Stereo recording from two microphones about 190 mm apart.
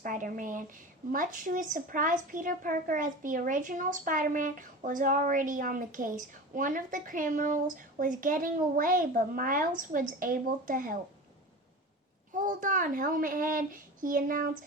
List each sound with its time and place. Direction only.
0.0 s speech: 45° right (ahead or behind)
12.3 s speech: 45° right (ahead or behind)